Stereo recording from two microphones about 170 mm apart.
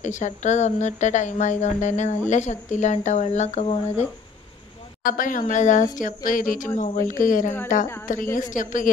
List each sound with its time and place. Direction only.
0.0 s speech: 45° left (ahead or behind)
5.0 s speech: 55° left (ahead or behind)